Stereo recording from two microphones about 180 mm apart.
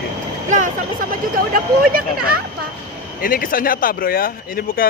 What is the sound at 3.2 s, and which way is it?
Speech, 50° left (ahead or behind).